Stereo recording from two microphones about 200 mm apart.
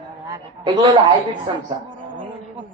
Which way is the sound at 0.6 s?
25° right (ahead or behind).